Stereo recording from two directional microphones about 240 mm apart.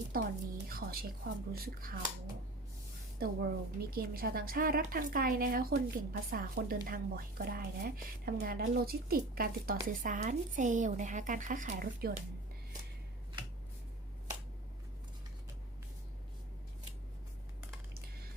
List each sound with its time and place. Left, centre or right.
0.1 s a sound: right
1.2 s speech: right
3.2 s speech: right